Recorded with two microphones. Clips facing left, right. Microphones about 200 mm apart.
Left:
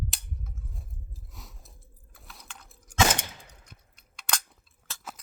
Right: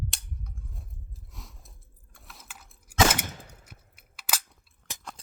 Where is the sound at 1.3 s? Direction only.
Centre (ahead or behind).